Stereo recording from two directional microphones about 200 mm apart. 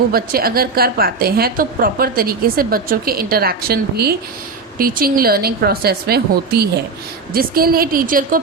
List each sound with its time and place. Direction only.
0.1 s a woman's voice: 50° right (ahead or behind)